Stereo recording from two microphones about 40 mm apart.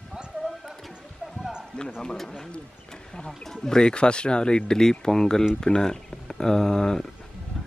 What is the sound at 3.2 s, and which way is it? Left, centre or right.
Speech, centre.